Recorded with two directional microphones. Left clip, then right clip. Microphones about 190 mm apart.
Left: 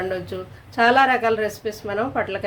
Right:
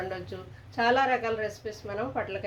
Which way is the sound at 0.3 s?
20° left (ahead or behind).